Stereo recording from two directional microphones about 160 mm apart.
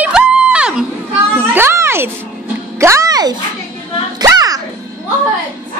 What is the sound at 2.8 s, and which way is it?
Music, 20° right (ahead or behind).